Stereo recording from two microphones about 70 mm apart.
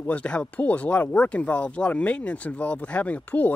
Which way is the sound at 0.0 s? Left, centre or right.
Centre.